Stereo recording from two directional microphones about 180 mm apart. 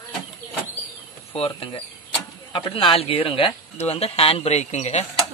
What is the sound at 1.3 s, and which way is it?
Speech, 30° left (ahead or behind).